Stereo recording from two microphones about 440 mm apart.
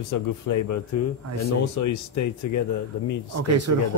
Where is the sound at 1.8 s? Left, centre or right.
Left.